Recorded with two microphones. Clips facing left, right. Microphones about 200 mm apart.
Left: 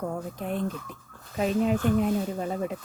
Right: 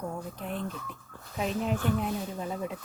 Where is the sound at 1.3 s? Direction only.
55° left (ahead or behind).